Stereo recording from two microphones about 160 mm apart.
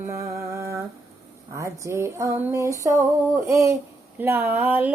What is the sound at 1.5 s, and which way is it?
Female singing, 20° right (ahead or behind).